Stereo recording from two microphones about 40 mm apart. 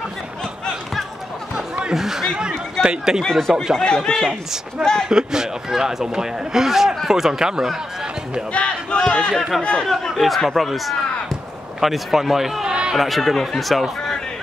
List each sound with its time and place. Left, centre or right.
2.0 s a man's voice: centre
2.8 s speech: right
3.3 s speech: centre
4.8 s a man's voice: centre
8.5 s speech: left
9.8 s speech: centre